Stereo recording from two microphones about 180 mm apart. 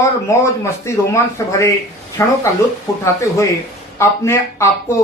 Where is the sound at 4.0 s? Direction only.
15° left (ahead or behind).